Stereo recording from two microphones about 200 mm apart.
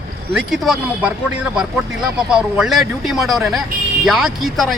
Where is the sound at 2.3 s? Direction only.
5° right (ahead or behind).